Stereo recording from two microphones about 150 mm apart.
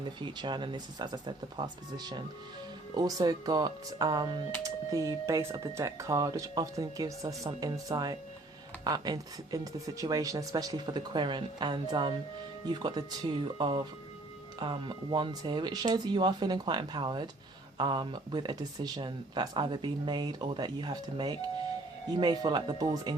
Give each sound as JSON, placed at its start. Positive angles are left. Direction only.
{"t": 0.0, "sound": "speech", "side_deg": -30}